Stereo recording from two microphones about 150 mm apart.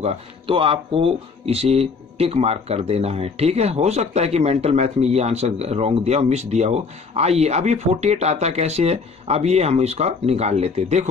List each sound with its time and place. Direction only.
0.0 s speech: 35° right (ahead or behind)